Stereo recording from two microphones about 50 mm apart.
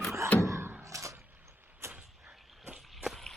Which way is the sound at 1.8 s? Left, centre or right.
Right.